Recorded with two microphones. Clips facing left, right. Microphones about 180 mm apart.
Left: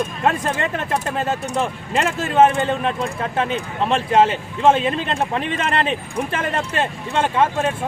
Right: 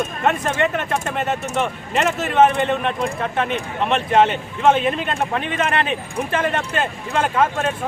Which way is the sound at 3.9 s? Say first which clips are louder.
Even; 30° left (ahead or behind).